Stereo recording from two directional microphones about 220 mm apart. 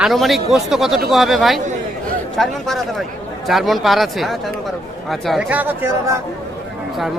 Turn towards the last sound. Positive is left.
turn(degrees=-10)  # may be behind; listen again after turning